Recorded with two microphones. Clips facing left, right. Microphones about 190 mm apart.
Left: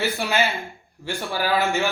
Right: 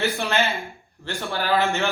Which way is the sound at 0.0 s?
5° left (ahead or behind).